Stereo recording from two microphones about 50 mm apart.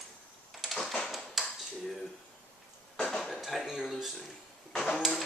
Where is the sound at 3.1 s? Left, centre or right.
Centre.